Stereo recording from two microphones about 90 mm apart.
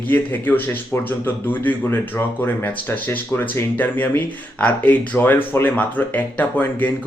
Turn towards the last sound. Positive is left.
turn(degrees=20)  # may be behind; listen again after turning